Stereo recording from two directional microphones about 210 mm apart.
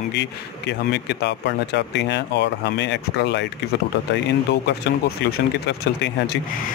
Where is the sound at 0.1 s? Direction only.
55° left (ahead or behind).